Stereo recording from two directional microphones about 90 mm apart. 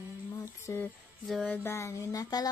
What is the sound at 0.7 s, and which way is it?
Music, 35° left (ahead or behind).